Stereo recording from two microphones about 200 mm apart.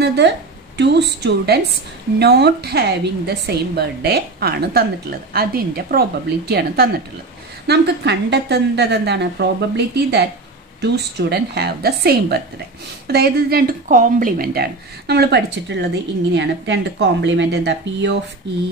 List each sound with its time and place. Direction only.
0.2 s a woman's voice: 60° right (ahead or behind)